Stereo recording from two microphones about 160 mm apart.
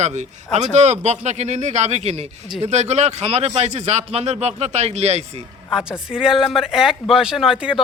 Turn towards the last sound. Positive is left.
turn(degrees=-5)  # may be behind; listen again after turning